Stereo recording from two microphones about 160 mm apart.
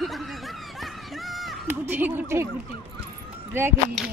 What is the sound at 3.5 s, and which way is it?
Speech, 15° right (ahead or behind).